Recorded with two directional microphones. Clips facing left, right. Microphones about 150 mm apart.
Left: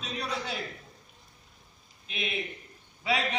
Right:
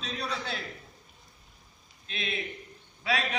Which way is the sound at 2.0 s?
15° left (ahead or behind).